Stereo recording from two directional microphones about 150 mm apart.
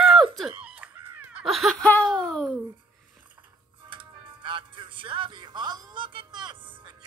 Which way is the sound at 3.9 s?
35° right (ahead or behind).